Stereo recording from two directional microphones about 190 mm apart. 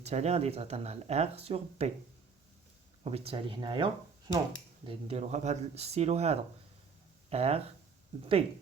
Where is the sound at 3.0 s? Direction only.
30° right (ahead or behind).